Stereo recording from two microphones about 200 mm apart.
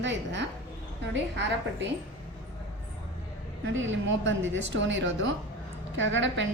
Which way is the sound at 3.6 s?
70° right (ahead or behind).